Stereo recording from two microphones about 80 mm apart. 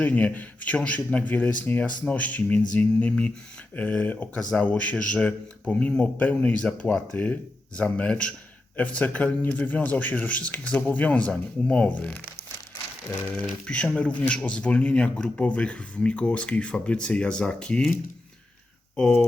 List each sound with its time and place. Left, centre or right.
0.0 s a man's voice: centre
13.3 s speech: centre
18.9 s speech: centre